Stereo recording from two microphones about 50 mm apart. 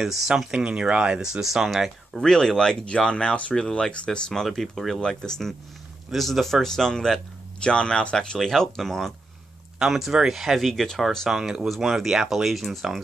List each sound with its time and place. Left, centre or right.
0.0 s speech: centre
0.5 s speech: centre
2.1 s speech: centre
4.3 s speech: centre
5.0 s speech: centre
6.1 s speech: centre
8.4 s speech: centre
9.8 s speech: centre
11.2 s speech: centre